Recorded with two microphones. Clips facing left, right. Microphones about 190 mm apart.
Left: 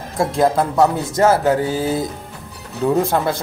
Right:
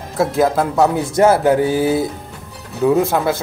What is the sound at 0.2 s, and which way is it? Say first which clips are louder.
Speech: right 1 dB; 5° right (ahead or behind).